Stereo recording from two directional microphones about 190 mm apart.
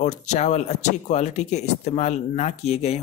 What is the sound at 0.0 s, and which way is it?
Speech, 40° left (ahead or behind).